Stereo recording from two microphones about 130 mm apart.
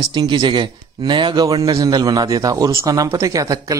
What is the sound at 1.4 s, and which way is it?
A man's voice, 25° right (ahead or behind).